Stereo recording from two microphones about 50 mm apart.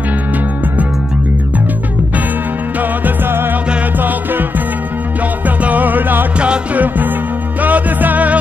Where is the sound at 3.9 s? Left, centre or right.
Right.